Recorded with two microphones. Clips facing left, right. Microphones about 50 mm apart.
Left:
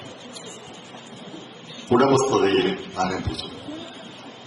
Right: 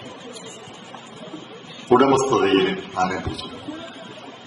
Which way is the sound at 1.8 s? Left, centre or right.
Right.